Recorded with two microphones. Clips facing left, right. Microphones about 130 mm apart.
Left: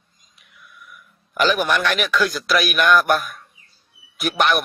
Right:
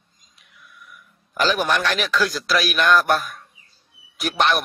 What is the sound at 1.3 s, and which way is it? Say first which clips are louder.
A man's voice: left 1 dB; 35° right (ahead or behind).